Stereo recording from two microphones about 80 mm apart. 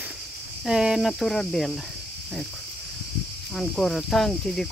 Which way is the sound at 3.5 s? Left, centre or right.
Centre.